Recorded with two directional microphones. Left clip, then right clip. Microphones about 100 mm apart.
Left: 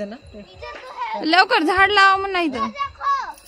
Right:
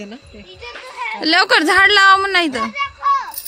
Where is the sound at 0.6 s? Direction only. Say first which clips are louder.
Right 1 dB; 15° right (ahead or behind).